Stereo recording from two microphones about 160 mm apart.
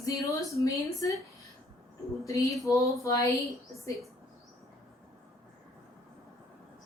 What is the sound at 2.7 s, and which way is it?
Speech, 20° left (ahead or behind).